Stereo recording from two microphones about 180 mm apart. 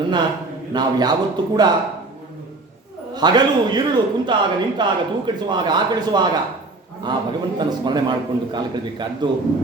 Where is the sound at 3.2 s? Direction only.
25° right (ahead or behind).